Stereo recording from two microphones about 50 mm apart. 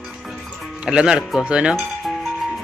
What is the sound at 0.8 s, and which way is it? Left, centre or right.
Speech, centre.